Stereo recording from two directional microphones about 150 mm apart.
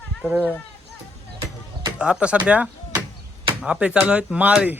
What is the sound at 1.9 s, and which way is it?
Speech, 5° right (ahead or behind).